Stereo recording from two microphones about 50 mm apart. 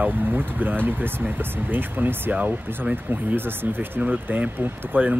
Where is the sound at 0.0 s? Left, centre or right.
Right.